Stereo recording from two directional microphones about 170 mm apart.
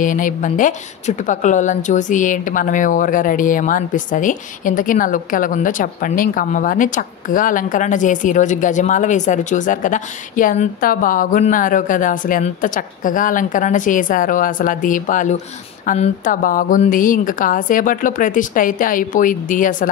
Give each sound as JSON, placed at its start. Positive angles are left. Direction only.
{"t": 0.0, "sound": "a woman's voice", "side_deg": 50}